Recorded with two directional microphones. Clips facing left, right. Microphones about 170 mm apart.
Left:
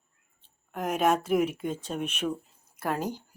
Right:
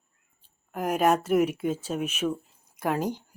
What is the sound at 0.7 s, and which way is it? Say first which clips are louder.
Speech: right 2 dB; 5° right (ahead or behind).